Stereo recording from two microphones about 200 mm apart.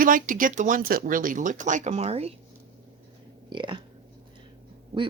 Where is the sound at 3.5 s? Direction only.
25° right (ahead or behind).